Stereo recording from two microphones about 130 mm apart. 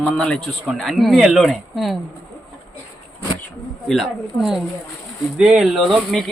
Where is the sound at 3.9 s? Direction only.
Centre (ahead or behind).